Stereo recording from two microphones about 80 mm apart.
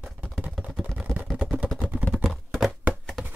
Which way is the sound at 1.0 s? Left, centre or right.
Centre.